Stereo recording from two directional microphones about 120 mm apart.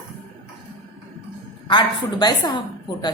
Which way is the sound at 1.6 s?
40° left (ahead or behind).